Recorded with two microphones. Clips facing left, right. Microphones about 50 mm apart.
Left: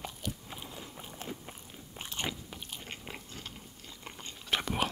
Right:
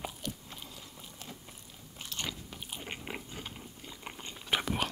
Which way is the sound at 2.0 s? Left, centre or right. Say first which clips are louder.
Left 2 dB; centre.